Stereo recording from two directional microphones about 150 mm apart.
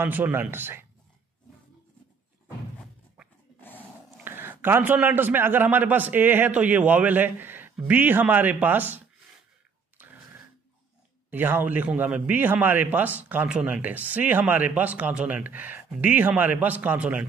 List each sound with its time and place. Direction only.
0.0 s a man's voice: 15° right (ahead or behind)
3.6 s dog: 10° left (ahead or behind)
4.2 s a man's voice: 15° right (ahead or behind)
10.0 s a sound: 10° right (ahead or behind)
11.2 s a man's voice: 10° right (ahead or behind)